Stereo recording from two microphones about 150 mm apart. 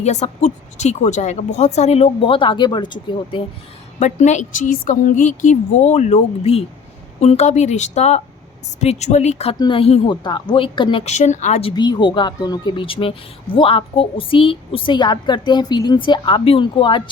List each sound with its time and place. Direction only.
0.0 s speech: 50° left (ahead or behind); by 3.4 s 30° left (ahead or behind)
4.0 s speech: 50° left (ahead or behind)
9.6 s speech: 35° left (ahead or behind)
11.0 s speech: 50° left (ahead or behind)
11.7 s speech: 30° left (ahead or behind)